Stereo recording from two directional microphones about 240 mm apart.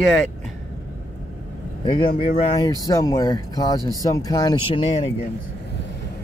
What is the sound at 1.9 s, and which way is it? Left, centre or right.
Speech, left.